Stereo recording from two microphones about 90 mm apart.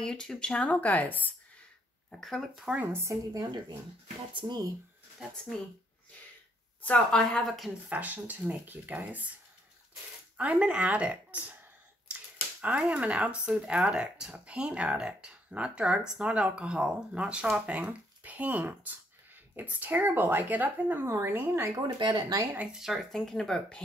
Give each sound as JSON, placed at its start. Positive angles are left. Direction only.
{"t": 0.0, "sound": "speech", "side_deg": 5}
{"t": 2.0, "sound": "speech", "side_deg": 5}
{"t": 2.7, "sound": "speech", "side_deg": -25}
{"t": 4.3, "sound": "speech", "side_deg": -65}
{"t": 6.8, "sound": "speech", "side_deg": 15}
{"t": 7.9, "sound": "speech", "side_deg": -20}
{"t": 10.3, "sound": "speech", "side_deg": -15}
{"t": 12.6, "sound": "speech", "side_deg": -15}
{"t": 21.9, "sound": "speech", "side_deg": -55}
{"t": 22.5, "sound": "speech", "side_deg": -15}
{"t": 22.8, "sound": "speech", "side_deg": 0}